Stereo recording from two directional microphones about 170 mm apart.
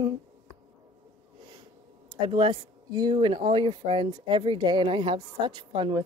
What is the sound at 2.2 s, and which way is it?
Speech, 30° right (ahead or behind).